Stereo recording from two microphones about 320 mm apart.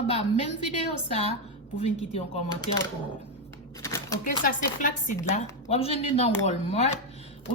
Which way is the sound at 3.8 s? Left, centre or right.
Centre.